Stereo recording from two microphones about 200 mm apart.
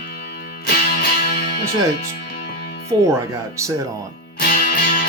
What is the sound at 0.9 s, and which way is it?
Music, 50° left (ahead or behind).